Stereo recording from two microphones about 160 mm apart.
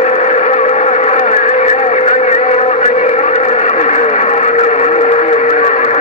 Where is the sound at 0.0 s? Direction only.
45° left (ahead or behind).